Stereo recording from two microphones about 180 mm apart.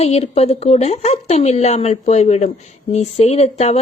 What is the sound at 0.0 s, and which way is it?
Speech, 35° left (ahead or behind).